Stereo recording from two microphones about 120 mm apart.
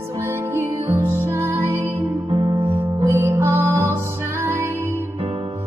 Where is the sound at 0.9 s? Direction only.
20° right (ahead or behind).